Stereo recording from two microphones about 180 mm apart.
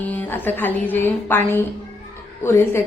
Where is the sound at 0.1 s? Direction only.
10° left (ahead or behind).